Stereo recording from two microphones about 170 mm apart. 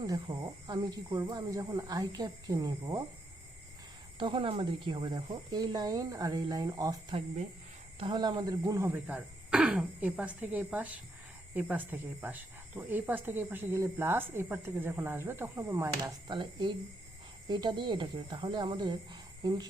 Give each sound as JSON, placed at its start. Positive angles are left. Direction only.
{"t": 0.0, "sound": "speech", "side_deg": -25}
{"t": 4.2, "sound": "speech", "side_deg": -30}